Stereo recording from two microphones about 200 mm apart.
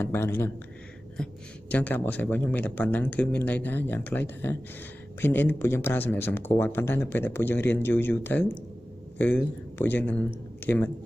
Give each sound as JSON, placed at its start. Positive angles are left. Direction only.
{"t": 0.0, "sound": "speech", "side_deg": 10}